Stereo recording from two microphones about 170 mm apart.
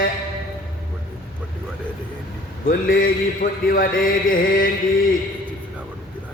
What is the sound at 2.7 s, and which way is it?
Mantra, 55° left (ahead or behind).